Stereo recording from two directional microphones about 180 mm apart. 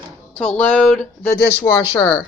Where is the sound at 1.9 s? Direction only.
30° left (ahead or behind).